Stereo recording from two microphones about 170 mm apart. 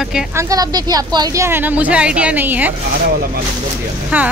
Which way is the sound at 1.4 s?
10° right (ahead or behind).